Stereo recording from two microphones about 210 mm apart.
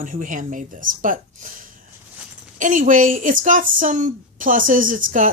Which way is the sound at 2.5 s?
40° right (ahead or behind).